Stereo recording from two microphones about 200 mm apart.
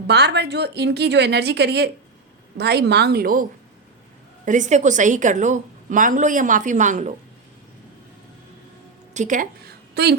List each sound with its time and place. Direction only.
0.1 s a woman's voice: 55° right (ahead or behind)
4.4 s a woman's voice: 40° right (ahead or behind)
9.1 s a woman's voice: 40° right (ahead or behind)